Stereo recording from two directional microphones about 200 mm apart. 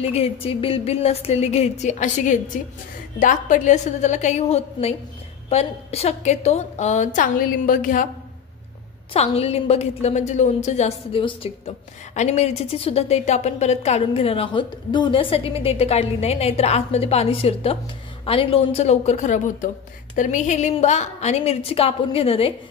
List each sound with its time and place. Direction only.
0.0 s a woman's voice: 30° left (ahead or behind)
9.1 s a woman's voice: 30° left (ahead or behind)